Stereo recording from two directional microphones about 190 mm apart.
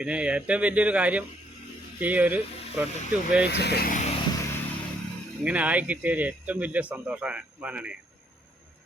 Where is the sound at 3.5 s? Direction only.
60° left (ahead or behind).